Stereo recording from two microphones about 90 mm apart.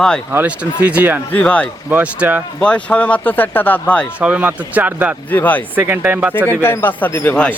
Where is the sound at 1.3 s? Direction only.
15° left (ahead or behind).